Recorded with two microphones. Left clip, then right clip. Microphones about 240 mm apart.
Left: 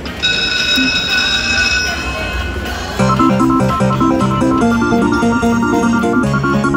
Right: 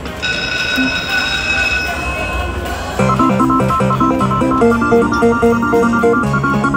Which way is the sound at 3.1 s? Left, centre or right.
Right.